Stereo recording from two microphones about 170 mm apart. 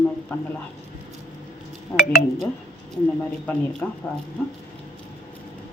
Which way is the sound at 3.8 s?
10° left (ahead or behind).